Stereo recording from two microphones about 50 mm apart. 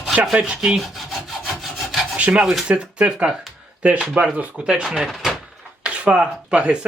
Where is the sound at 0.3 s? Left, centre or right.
Centre.